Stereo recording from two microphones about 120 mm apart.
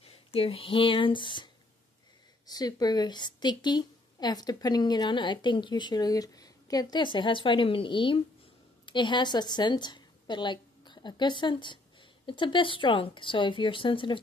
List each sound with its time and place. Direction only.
0.0 s a woman's voice: 55° left (ahead or behind)